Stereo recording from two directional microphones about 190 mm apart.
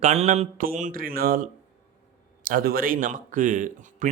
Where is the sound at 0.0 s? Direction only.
35° right (ahead or behind).